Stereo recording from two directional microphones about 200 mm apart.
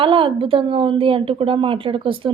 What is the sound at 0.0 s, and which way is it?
A woman's voice, 25° right (ahead or behind).